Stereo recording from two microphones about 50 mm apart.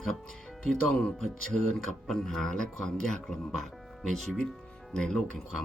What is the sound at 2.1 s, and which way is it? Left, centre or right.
Speech, centre.